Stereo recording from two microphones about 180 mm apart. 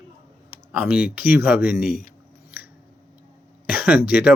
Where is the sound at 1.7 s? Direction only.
55° left (ahead or behind).